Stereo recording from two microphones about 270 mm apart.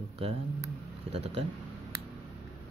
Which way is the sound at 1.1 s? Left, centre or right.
Right.